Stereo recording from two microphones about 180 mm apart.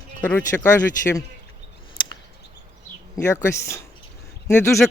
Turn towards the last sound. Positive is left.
turn(degrees=15)  # may be behind; listen again after turning